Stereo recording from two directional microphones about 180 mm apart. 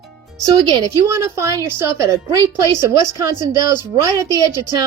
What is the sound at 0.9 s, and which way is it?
A woman's voice, 15° right (ahead or behind).